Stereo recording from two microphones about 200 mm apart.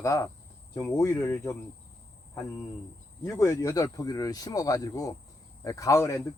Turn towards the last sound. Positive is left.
turn(degrees=15)  # may be behind; listen again after turning